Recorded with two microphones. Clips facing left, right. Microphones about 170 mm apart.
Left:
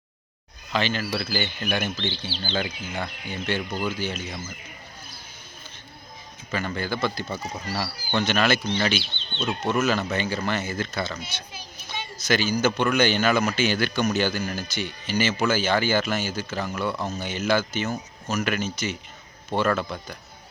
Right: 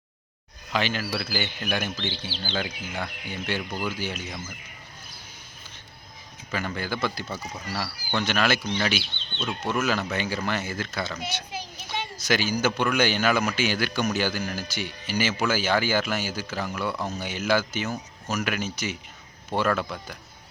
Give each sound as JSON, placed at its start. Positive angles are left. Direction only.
{"t": 0.7, "sound": "speech", "side_deg": -10}
{"t": 3.0, "sound": "speech", "side_deg": -10}
{"t": 3.7, "sound": "speech", "side_deg": 20}
{"t": 4.0, "sound": "speech", "side_deg": -10}
{"t": 6.5, "sound": "speech", "side_deg": -5}
{"t": 7.7, "sound": "speech", "side_deg": 5}
{"t": 8.2, "sound": "speech", "side_deg": -10}